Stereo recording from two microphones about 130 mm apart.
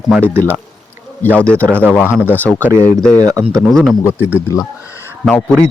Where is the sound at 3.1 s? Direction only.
25° right (ahead or behind).